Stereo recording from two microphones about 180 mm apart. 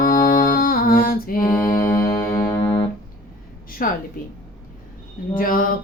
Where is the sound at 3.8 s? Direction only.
50° left (ahead or behind).